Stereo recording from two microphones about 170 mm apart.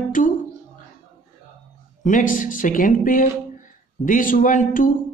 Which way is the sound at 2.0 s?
50° left (ahead or behind).